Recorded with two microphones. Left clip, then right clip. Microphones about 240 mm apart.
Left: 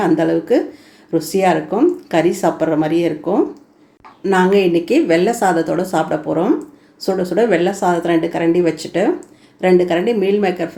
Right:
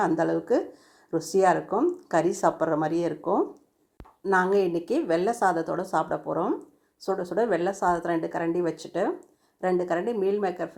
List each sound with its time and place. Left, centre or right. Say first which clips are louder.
0.0 s speech: left 9 dB; centre